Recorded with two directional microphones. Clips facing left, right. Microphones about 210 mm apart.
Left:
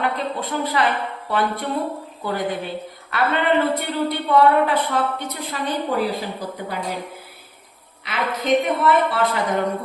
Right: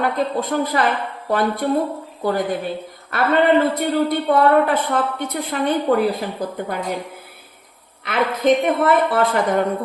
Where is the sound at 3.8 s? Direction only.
50° right (ahead or behind).